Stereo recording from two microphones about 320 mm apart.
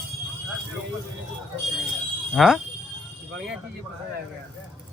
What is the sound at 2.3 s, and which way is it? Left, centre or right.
Speech, centre.